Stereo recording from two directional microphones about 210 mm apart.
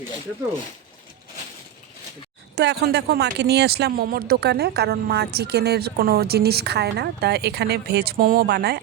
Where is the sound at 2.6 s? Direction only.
50° right (ahead or behind).